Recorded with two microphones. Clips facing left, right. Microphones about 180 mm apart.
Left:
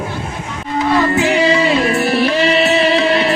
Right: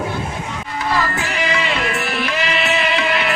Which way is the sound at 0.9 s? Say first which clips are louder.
Left 9 dB; 25° left (ahead or behind).